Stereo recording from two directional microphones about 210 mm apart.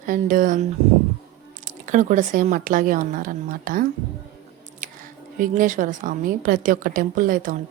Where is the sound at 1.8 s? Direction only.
35° right (ahead or behind).